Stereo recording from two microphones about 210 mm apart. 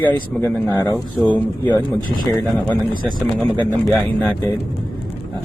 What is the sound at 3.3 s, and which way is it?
Speech, 5° left (ahead or behind).